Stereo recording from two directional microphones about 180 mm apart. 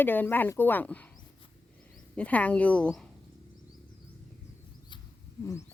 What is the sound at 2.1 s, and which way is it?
Speech, 5° left (ahead or behind).